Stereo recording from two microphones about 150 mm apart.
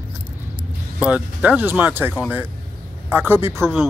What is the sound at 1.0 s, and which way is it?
Speech, 10° right (ahead or behind).